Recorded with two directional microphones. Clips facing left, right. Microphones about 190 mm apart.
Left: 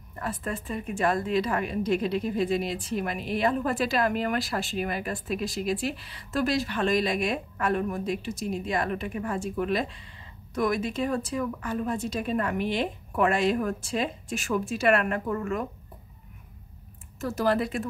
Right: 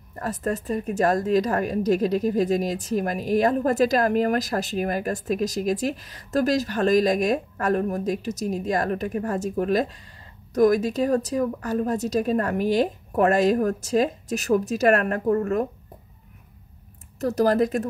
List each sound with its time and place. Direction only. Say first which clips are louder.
0.1 s a woman's voice: right 6 dB; 40° right (ahead or behind)
17.2 s a woman's voice: right 6 dB; 40° right (ahead or behind)